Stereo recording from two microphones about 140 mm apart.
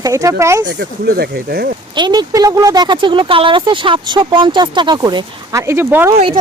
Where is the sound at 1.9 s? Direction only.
30° right (ahead or behind).